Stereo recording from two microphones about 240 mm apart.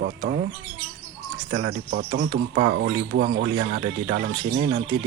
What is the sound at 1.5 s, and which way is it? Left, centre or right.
Speech, right.